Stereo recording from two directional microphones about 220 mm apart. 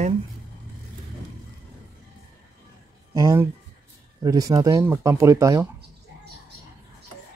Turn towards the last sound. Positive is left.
turn(degrees=-15)  # may be behind; listen again after turning